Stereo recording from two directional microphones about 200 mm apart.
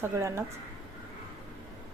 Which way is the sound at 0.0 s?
15° right (ahead or behind).